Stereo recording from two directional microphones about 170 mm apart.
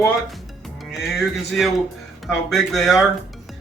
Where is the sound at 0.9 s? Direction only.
Centre (ahead or behind).